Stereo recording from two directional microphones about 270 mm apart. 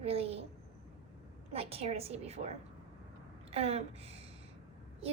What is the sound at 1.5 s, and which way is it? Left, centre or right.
A woman's voice, right.